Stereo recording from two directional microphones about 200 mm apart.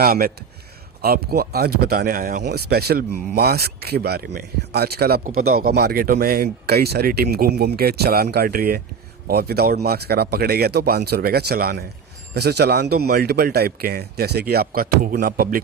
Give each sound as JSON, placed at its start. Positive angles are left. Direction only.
{"t": 0.0, "sound": "speech", "side_deg": -45}